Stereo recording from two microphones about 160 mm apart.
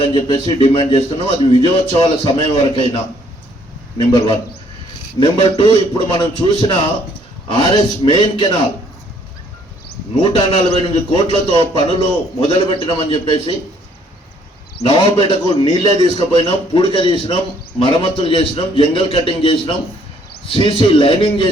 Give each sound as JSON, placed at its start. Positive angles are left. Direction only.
{"t": 0.0, "sound": "a man's voice", "side_deg": 35}
{"t": 10.2, "sound": "a man's voice", "side_deg": 35}
{"t": 15.2, "sound": "a man's voice", "side_deg": 30}